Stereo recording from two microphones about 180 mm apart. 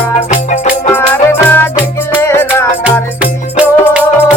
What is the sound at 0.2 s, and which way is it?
Music, 35° left (ahead or behind).